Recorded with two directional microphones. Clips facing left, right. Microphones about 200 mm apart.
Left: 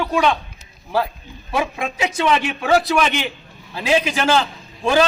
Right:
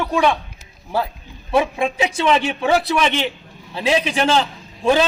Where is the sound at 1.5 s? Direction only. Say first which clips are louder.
Right 4 dB; 25° right (ahead or behind).